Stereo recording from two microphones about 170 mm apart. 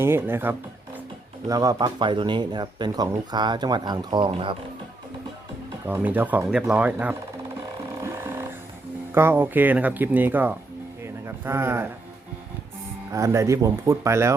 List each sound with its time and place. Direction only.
0.0 s speech: 15° right (ahead or behind); by 4.5 s 30° right (ahead or behind)
5.8 s speech: 10° right (ahead or behind)
8.0 s vehicle: 15° right (ahead or behind)
9.1 s speech: 15° right (ahead or behind)
11.0 s a sound: 15° right (ahead or behind)
13.1 s speech: 15° right (ahead or behind)